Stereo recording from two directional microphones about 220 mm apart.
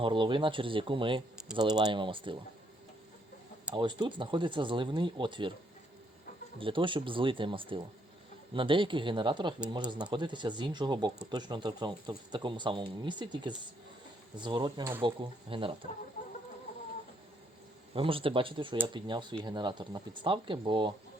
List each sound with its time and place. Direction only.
0.0 s speech: 20° right (ahead or behind)
3.8 s speech: 20° right (ahead or behind)
6.6 s speech: 25° right (ahead or behind)
17.9 s speech: 25° right (ahead or behind)